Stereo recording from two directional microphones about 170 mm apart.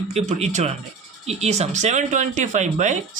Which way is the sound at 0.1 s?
40° right (ahead or behind).